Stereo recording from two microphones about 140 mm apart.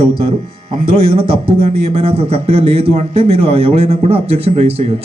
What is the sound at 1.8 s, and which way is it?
A man's voice, 45° right (ahead or behind).